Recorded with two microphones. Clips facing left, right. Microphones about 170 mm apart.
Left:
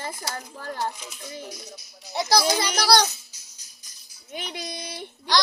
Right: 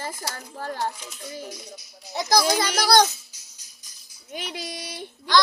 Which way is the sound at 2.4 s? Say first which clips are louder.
Right 3 dB; 45° right (ahead or behind).